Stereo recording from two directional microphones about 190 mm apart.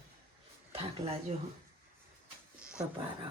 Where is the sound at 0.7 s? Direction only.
35° right (ahead or behind).